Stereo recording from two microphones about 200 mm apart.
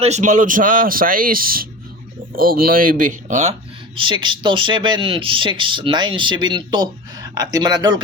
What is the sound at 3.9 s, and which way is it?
Speech, 25° right (ahead or behind).